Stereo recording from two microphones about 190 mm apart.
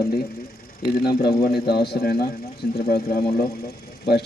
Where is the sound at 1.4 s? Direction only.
55° left (ahead or behind).